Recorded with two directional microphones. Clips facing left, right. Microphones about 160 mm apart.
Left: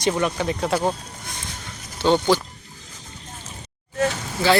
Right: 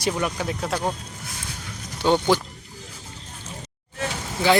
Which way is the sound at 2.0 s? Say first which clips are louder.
Left 1 dB; 10° right (ahead or behind).